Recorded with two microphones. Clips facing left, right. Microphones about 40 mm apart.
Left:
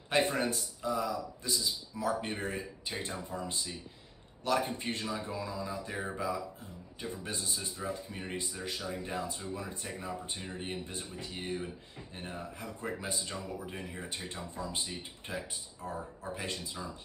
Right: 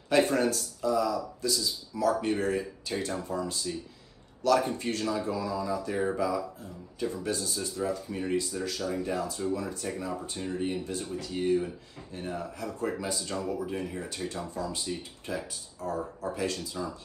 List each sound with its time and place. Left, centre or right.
0.1 s a man's voice: left